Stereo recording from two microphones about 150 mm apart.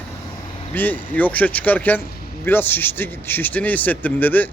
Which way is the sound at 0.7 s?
10° left (ahead or behind).